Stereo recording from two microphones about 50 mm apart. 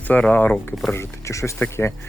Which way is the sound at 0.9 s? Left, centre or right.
Left.